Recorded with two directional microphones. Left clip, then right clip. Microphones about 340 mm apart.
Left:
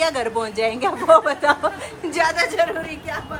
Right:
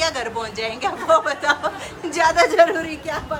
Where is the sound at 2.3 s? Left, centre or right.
Right.